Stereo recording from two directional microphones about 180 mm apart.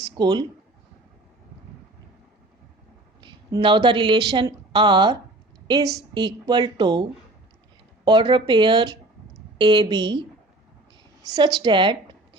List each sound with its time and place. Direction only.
0.2 s a woman's voice: 25° right (ahead or behind)
3.2 s a woman's voice: 25° right (ahead or behind)
8.0 s a woman's voice: 25° right (ahead or behind)